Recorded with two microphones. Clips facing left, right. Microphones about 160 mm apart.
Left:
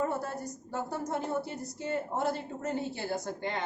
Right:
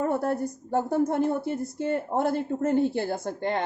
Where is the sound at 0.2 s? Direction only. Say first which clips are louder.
Right 10 dB; 55° right (ahead or behind).